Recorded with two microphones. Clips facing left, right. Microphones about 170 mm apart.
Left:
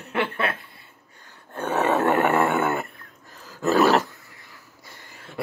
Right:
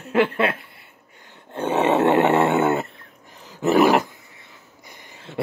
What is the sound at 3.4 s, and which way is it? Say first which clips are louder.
Dog: right 3 dB; 20° right (ahead or behind).